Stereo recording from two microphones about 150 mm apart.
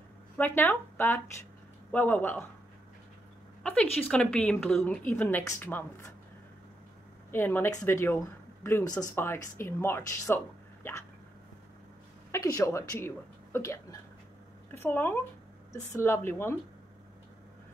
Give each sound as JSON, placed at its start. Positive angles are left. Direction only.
{"t": 0.4, "sound": "speech", "side_deg": 10}
{"t": 3.6, "sound": "speech", "side_deg": 10}
{"t": 7.2, "sound": "speech", "side_deg": 15}
{"t": 12.3, "sound": "speech", "side_deg": 20}